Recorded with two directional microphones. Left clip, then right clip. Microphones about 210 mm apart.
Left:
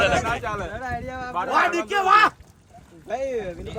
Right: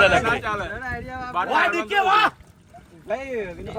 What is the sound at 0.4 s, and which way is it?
Speech, 30° left (ahead or behind).